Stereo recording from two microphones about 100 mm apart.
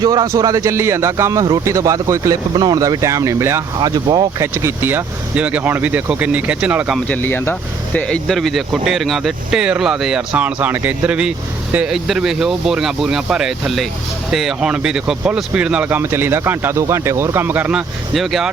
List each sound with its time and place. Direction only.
0.0 s speech: 40° right (ahead or behind)
3.8 s speech: 40° right (ahead or behind)
4.4 s speech: 30° right (ahead or behind); by 6.9 s 10° right (ahead or behind)
7.1 s speech: 20° left (ahead or behind)
7.9 s speech: 10° left (ahead or behind); by 17.8 s 15° right (ahead or behind)
18.1 s speech: centre (ahead or behind)